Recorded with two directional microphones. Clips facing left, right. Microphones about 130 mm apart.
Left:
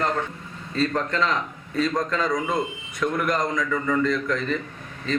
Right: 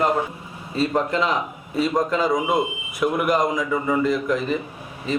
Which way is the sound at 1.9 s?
25° right (ahead or behind).